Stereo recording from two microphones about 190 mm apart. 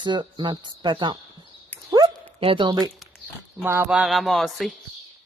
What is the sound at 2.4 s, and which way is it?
Speech, 30° right (ahead or behind).